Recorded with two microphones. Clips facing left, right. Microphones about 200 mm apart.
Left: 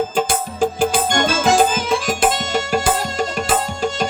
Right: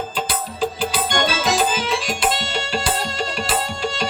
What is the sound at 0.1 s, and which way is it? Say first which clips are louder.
Music: left 6 dB; 50° left (ahead or behind).